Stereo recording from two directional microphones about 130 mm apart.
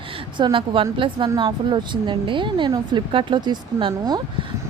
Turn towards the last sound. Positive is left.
turn(degrees=-35)  # may be behind; listen again after turning